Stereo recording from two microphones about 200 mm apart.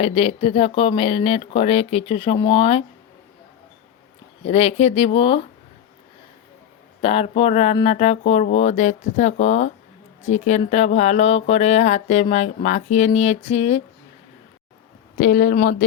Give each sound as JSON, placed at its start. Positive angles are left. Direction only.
{"t": 0.0, "sound": "speech", "side_deg": 30}
{"t": 4.4, "sound": "speech", "side_deg": 30}
{"t": 7.0, "sound": "mantra", "side_deg": 30}
{"t": 15.2, "sound": "speech", "side_deg": 50}